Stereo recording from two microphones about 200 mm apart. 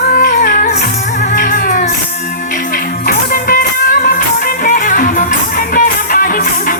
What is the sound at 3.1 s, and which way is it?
Music, 45° left (ahead or behind).